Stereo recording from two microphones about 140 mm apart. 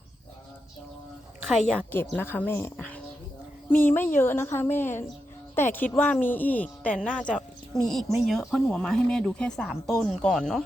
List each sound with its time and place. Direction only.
1.7 s a woman's voice: 15° left (ahead or behind)